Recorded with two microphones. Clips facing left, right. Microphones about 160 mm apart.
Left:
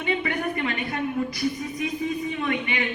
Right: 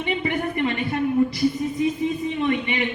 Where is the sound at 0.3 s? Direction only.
25° right (ahead or behind).